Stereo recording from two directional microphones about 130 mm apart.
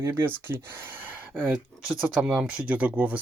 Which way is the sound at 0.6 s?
15° right (ahead or behind).